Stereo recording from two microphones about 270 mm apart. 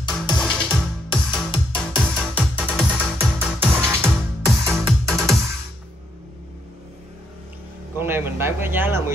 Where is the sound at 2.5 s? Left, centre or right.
Centre.